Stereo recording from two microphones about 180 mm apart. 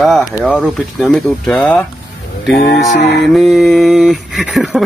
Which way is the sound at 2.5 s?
60° left (ahead or behind).